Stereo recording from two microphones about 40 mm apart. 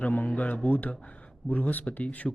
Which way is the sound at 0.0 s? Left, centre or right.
Left.